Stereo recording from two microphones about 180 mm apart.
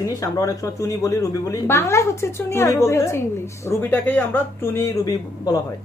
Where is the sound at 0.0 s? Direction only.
20° left (ahead or behind).